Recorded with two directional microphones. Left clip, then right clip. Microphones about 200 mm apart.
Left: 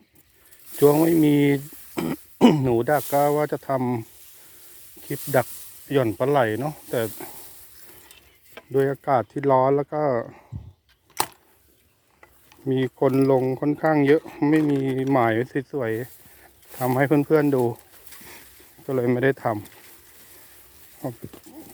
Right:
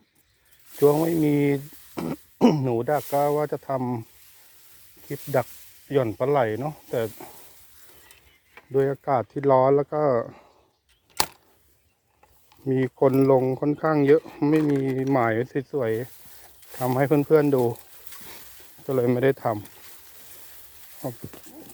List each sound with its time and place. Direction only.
0.8 s speech: 15° left (ahead or behind)
5.3 s speech: 40° left (ahead or behind)
5.9 s speech: 15° left (ahead or behind)
8.7 s speech: 5° left (ahead or behind)
11.1 s chopping: 10° right (ahead or behind)
12.5 s speech: centre (ahead or behind)
16.7 s speech: 10° left (ahead or behind)
18.9 s speech: centre (ahead or behind)
21.0 s a sound: 5° left (ahead or behind)